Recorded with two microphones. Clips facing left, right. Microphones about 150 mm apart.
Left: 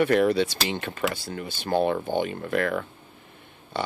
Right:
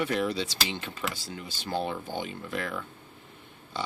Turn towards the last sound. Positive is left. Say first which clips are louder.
# left 5 dB
turn(degrees=60)  # may be behind; listen again after turning